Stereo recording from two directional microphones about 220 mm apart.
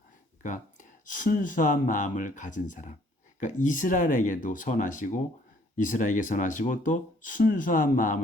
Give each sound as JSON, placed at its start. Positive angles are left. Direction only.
{"t": 0.4, "sound": "speech", "side_deg": 35}